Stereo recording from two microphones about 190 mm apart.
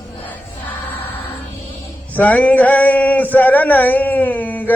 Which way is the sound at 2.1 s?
10° left (ahead or behind).